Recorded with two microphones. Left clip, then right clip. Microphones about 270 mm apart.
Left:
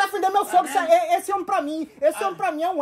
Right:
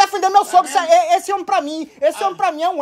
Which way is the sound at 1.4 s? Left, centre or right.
Centre.